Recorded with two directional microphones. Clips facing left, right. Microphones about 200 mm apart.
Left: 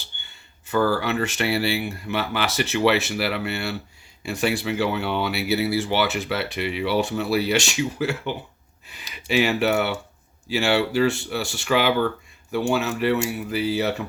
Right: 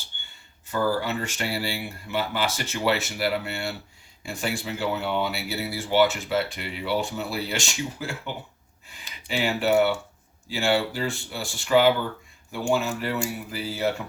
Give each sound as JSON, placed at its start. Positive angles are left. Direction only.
{"t": 0.7, "sound": "speech", "side_deg": 75}